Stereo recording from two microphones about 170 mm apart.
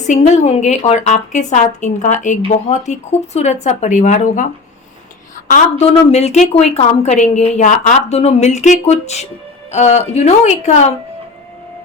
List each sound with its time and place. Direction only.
0.0 s a woman's voice: 45° left (ahead or behind)
5.5 s a woman's voice: 50° left (ahead or behind)
5.8 s a woman's voice: 35° left (ahead or behind)